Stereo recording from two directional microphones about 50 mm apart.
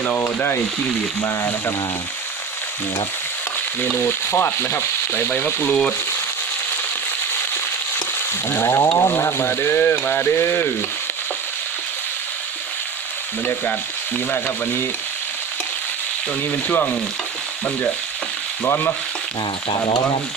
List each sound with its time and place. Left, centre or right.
1.2 s a sound: left
3.9 s frying: left
5.3 s speech: left
8.6 s a sound: left
14.3 s speech: left
16.5 s speech: left
18.7 s frying: left